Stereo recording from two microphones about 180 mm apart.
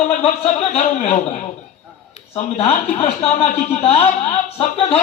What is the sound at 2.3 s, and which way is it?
A man's voice, 35° left (ahead or behind).